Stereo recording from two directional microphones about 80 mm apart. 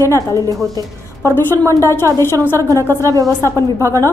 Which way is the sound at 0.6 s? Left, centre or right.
Right.